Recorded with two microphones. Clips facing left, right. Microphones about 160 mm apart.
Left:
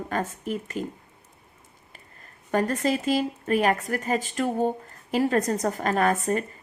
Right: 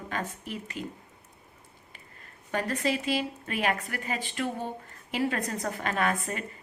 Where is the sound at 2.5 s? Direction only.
45° left (ahead or behind).